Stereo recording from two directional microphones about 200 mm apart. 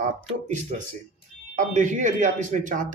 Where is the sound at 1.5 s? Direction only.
40° right (ahead or behind).